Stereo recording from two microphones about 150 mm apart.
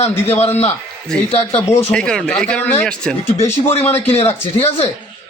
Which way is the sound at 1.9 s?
5° left (ahead or behind).